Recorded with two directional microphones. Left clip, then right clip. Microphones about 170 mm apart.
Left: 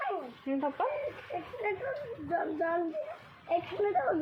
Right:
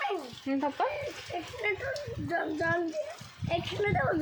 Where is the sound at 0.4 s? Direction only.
35° right (ahead or behind).